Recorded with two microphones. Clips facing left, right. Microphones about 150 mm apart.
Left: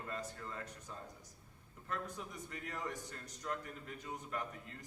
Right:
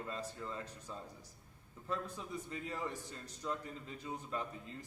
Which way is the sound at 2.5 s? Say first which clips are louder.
Right 1 dB; 25° right (ahead or behind).